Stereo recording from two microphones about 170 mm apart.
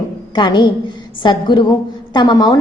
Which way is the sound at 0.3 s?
25° left (ahead or behind).